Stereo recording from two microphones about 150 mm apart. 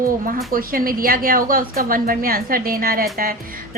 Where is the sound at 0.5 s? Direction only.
70° right (ahead or behind).